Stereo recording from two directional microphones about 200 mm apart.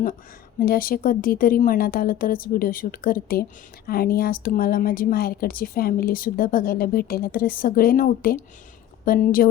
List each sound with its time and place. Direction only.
0.6 s speech: 45° left (ahead or behind)